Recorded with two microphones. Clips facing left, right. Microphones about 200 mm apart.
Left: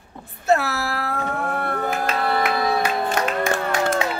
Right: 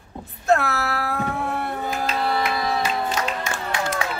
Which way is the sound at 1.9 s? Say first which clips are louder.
Even; 55° left (ahead or behind).